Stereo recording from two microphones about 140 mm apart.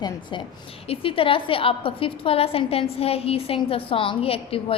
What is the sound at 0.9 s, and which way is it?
A woman's voice, 40° left (ahead or behind).